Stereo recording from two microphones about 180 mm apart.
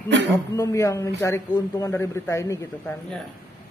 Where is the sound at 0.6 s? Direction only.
15° left (ahead or behind).